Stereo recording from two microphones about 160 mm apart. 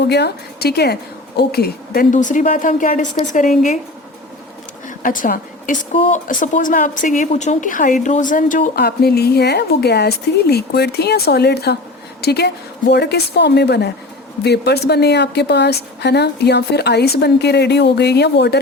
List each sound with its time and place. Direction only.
0.0 s a woman's voice: 90° left; by 3.8 s 55° left (ahead or behind)
5.0 s a woman's voice: 55° left (ahead or behind)
8.8 s a woman's voice: 80° left